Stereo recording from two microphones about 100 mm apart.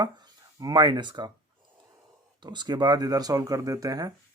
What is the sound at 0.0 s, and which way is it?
Speech, 45° right (ahead or behind).